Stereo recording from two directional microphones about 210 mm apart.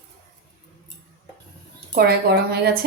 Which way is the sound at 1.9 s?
50° right (ahead or behind).